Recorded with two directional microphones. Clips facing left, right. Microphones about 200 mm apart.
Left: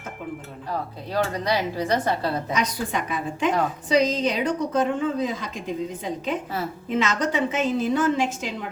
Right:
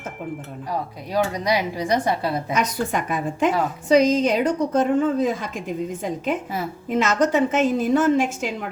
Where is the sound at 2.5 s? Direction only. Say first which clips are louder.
Right 3 dB; 50° right (ahead or behind).